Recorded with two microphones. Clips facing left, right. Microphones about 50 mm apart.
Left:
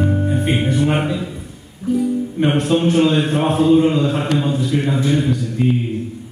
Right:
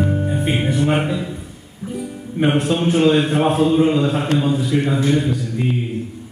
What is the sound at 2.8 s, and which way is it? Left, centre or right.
Mantra, right.